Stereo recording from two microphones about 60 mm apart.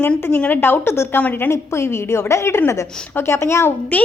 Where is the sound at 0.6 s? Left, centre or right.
Left.